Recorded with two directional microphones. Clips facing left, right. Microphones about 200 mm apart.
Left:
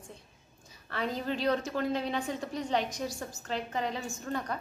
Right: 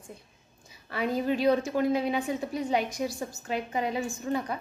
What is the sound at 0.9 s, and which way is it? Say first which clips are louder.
A woman's voice: right 5 dB; 10° right (ahead or behind).